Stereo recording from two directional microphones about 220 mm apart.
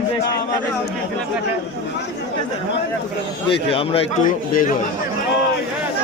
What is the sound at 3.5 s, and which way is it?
A man's voice, 25° left (ahead or behind).